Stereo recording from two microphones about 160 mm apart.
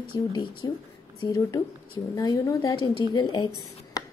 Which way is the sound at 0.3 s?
30° left (ahead or behind).